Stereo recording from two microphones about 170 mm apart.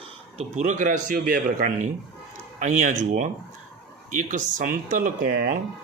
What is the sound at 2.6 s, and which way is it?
Mantra, 45° right (ahead or behind).